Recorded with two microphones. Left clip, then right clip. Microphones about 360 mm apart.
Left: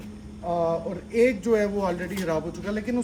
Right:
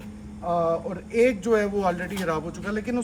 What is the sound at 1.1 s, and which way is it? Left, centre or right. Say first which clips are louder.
Speech: even; centre.